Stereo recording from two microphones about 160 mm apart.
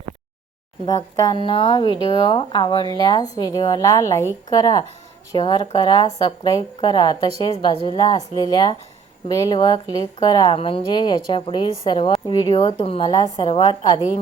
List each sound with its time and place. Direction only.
0.9 s a woman's voice: 25° left (ahead or behind)